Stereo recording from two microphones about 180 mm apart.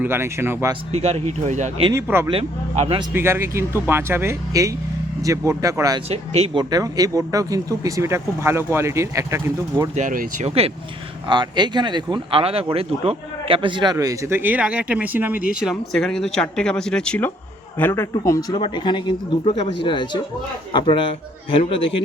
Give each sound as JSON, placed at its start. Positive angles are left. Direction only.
{"t": 0.0, "sound": "speech", "side_deg": -15}
{"t": 0.9, "sound": "speech", "side_deg": -35}
{"t": 1.9, "sound": "speech", "side_deg": -15}
{"t": 2.3, "sound": "speech", "side_deg": -35}
{"t": 3.1, "sound": "speech", "side_deg": -15}
{"t": 6.1, "sound": "speech", "side_deg": -35}
{"t": 9.9, "sound": "speech", "side_deg": -45}
{"t": 15.7, "sound": "a man's voice", "side_deg": 5}